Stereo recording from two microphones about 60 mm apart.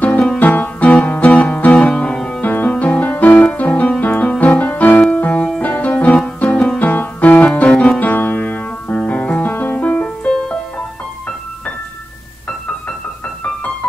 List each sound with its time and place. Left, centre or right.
0.4 s music: left
1.9 s music: centre
2.4 s music: left